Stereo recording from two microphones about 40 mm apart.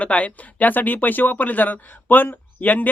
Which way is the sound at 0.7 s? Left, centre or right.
Left.